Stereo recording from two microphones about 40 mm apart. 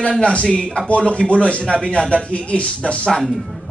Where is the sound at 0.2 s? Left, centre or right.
Left.